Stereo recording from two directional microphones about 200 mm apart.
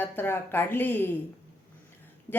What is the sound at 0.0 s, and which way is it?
A woman's voice, 10° left (ahead or behind).